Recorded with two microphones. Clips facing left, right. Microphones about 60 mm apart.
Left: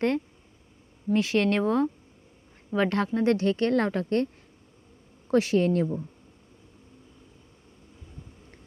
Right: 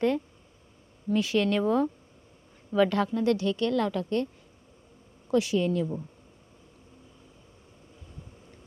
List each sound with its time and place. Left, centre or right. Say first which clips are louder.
1.2 s speech: left 1 dB; left
5.3 s speech: left 3 dB; left